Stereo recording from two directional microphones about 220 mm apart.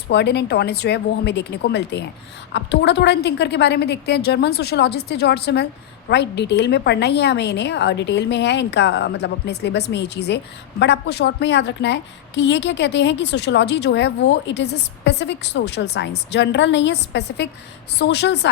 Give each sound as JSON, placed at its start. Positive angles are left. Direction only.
{"t": 0.1, "sound": "a woman's voice", "side_deg": 50}